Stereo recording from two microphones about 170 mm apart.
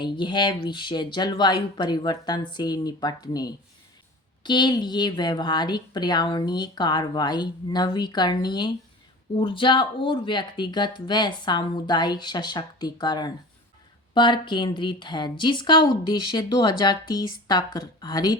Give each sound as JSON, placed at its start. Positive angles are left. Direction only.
{"t": 0.0, "sound": "a woman's voice", "side_deg": 25}